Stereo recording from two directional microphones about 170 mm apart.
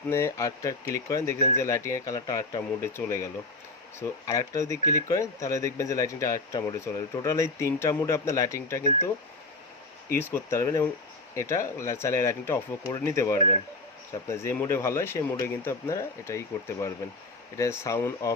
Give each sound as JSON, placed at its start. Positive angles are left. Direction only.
{"t": 0.1, "sound": "speech", "side_deg": 15}
{"t": 4.3, "sound": "speech", "side_deg": 20}
{"t": 10.1, "sound": "speech", "side_deg": 15}
{"t": 17.6, "sound": "speech", "side_deg": 15}